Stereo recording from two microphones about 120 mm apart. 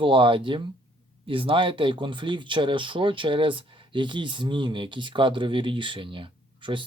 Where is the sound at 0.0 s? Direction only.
45° right (ahead or behind).